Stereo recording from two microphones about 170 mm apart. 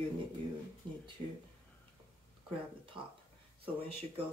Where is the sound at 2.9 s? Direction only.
30° right (ahead or behind).